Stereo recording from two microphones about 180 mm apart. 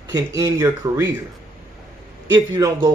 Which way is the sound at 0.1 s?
20° right (ahead or behind).